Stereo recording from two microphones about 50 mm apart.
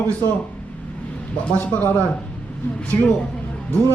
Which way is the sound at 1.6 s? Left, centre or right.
Left.